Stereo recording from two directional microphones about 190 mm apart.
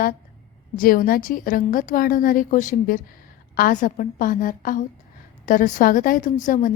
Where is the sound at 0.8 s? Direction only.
50° left (ahead or behind).